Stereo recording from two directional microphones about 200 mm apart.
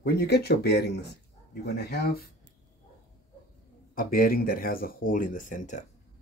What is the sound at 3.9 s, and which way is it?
Speech, 45° left (ahead or behind).